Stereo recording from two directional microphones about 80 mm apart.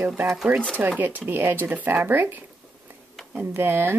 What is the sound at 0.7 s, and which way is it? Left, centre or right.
Speech, right.